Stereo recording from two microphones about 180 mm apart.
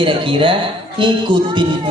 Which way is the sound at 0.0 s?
30° right (ahead or behind).